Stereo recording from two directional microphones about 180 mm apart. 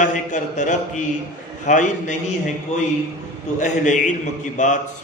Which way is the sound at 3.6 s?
45° left (ahead or behind).